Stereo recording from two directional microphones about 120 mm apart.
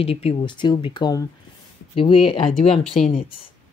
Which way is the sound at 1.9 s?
50° left (ahead or behind).